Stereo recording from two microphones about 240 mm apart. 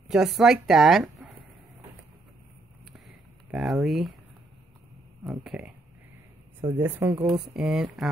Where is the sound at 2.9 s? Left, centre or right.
Centre.